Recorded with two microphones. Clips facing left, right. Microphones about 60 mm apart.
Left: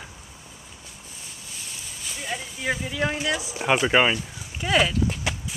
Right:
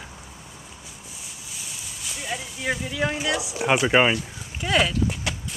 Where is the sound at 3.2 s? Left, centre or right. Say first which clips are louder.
Right 1 dB; centre.